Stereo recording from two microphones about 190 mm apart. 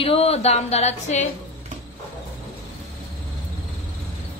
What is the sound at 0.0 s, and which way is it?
A woman's voice, 30° left (ahead or behind).